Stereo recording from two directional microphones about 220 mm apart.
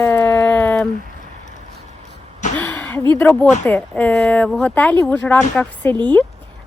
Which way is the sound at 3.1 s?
10° left (ahead or behind).